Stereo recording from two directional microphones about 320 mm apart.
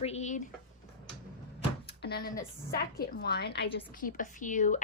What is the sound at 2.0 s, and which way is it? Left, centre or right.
A woman's voice, left.